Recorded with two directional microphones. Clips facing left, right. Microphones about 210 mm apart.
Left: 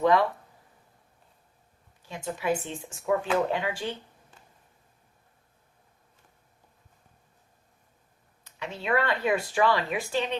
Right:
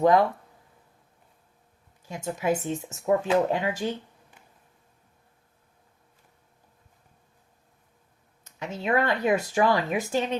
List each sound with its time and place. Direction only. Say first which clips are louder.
0.0 s speech: right 3 dB; 45° right (ahead or behind)
2.0 s speech: right 2 dB; 45° right (ahead or behind)
8.4 s speech: right 2 dB; 45° right (ahead or behind)